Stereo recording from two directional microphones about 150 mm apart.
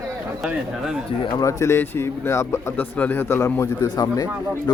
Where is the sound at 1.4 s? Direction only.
20° left (ahead or behind).